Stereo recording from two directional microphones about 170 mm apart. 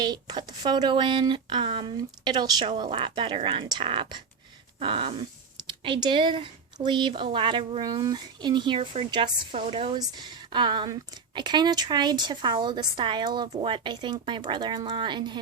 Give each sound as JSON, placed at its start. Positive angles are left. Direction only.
{"t": 0.0, "sound": "a woman's voice", "side_deg": -25}
{"t": 4.8, "sound": "a sound", "side_deg": -30}
{"t": 5.6, "sound": "a woman's voice", "side_deg": -30}